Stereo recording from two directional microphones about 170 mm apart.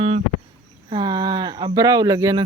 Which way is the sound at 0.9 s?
25° right (ahead or behind).